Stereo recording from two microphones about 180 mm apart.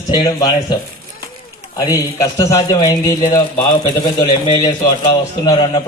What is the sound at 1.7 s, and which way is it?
A man's voice, 20° left (ahead or behind).